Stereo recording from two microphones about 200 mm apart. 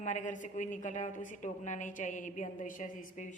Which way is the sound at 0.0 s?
35° left (ahead or behind).